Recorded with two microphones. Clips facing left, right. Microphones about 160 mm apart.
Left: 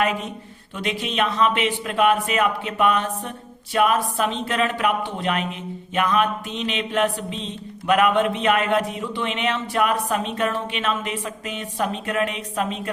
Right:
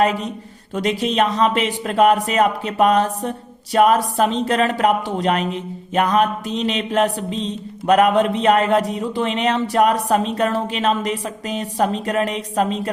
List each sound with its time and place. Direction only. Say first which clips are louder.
0.0 s speech: right 5 dB; 35° right (ahead or behind)